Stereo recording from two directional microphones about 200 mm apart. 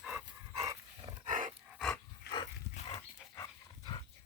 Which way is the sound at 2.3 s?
55° left (ahead or behind).